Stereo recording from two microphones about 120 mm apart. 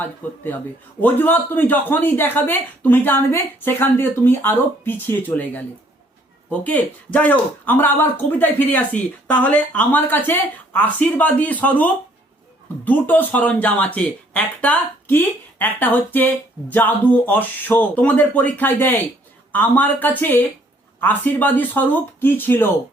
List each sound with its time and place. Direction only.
0.0 s speech: 15° left (ahead or behind)